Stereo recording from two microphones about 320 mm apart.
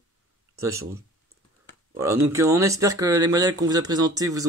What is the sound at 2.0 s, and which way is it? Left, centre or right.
Speech, centre.